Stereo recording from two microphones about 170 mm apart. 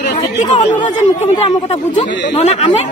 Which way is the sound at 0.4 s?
40° left (ahead or behind).